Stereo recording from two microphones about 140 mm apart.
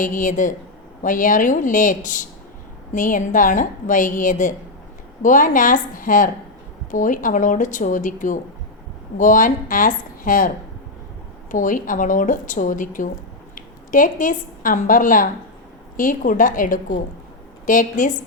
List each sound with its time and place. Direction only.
0.0 s a woman's voice: 70° left (ahead or behind)
11.5 s a woman's voice: 70° left (ahead or behind)